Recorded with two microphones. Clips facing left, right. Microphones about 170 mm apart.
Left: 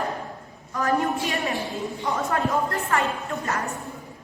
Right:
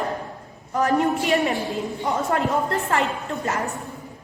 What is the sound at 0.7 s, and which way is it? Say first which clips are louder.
Speech: right 3 dB; 25° right (ahead or behind).